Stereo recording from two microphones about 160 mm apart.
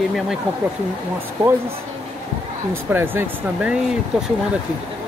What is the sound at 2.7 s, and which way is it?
Speech, 15° right (ahead or behind).